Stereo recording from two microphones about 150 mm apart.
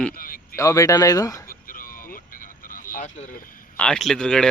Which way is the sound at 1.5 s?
70° left (ahead or behind).